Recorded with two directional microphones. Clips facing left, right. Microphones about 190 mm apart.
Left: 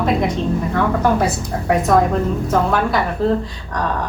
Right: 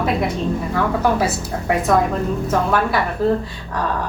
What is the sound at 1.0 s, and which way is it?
A woman's voice, 5° right (ahead or behind).